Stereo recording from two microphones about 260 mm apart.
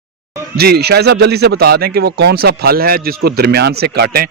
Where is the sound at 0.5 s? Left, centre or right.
Right.